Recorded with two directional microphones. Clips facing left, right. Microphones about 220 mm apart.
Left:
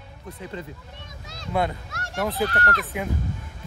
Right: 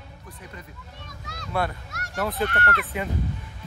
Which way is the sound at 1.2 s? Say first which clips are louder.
Left 2 dB; 25° left (ahead or behind).